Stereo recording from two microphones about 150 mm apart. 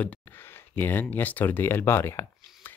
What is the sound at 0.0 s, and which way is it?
Speech, 10° left (ahead or behind).